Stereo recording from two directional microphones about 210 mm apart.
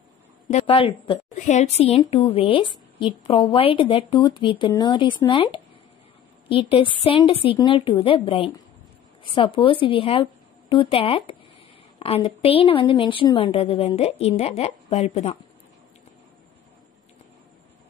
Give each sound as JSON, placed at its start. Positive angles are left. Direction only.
{"t": 0.5, "sound": "a woman's voice", "side_deg": 30}